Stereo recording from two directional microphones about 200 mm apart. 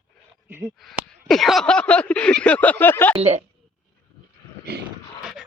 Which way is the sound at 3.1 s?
30° right (ahead or behind).